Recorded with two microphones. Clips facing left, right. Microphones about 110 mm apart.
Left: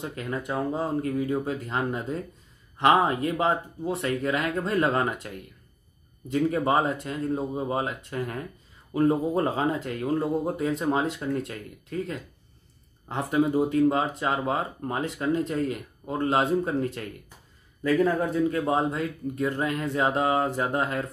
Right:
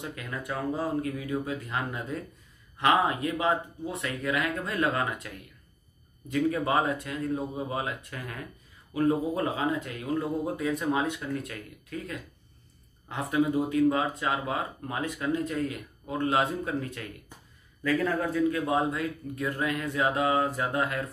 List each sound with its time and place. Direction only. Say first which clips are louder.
0.0 s speech: left 5 dB; 30° left (ahead or behind)
6.3 s speech: left 3 dB; 30° left (ahead or behind)
10.9 s speech: left 3 dB; 35° left (ahead or behind)
17.9 s speech: left 4 dB; 15° left (ahead or behind)